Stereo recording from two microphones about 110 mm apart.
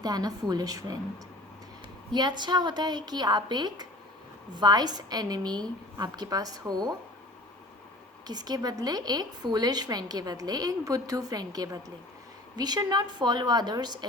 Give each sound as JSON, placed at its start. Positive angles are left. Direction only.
{"t": 0.0, "sound": "a woman's voice", "side_deg": -35}
{"t": 2.1, "sound": "a woman's voice", "side_deg": -40}
{"t": 8.3, "sound": "a woman's voice", "side_deg": -40}